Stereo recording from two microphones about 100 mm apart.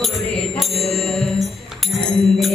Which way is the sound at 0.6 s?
5° left (ahead or behind).